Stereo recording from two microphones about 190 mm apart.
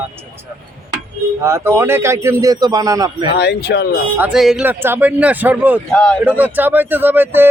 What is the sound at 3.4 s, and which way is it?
Speech, 60° left (ahead or behind).